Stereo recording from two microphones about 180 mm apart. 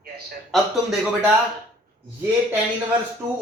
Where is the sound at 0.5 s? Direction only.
Centre (ahead or behind).